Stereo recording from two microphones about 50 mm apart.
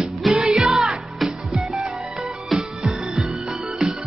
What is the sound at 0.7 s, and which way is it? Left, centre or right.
Music, centre.